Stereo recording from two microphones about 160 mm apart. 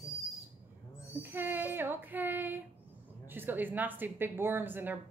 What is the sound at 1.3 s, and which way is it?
A woman's voice, 15° right (ahead or behind).